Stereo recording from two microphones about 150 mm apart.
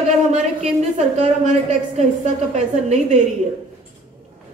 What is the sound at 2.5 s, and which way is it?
Speech, 50° right (ahead or behind).